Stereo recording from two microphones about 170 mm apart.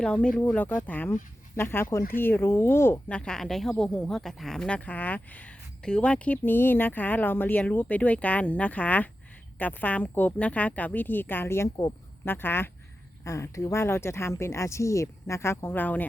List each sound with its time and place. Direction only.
0.0 s speech: 5° left (ahead or behind)